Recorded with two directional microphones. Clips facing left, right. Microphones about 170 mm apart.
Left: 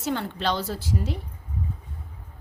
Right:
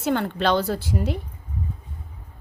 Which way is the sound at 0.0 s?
60° right (ahead or behind).